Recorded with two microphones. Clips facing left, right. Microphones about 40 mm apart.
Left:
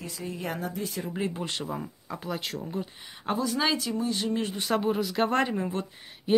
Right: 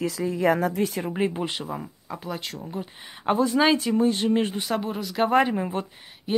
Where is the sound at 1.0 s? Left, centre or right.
Right.